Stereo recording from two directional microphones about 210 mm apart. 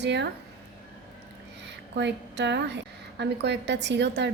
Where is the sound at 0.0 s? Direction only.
55° right (ahead or behind).